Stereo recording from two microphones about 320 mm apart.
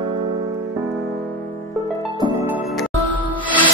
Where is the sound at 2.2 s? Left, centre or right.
Centre.